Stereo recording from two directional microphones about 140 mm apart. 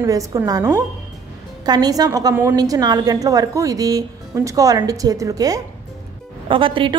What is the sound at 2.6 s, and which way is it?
A woman's voice, 30° right (ahead or behind).